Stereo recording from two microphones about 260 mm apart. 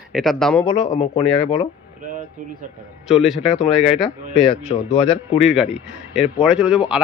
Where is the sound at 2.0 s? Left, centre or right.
Right.